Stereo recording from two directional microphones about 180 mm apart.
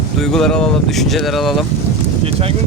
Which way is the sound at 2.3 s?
35° right (ahead or behind).